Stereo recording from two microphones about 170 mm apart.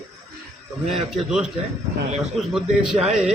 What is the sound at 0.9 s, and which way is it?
Speech, 5° right (ahead or behind).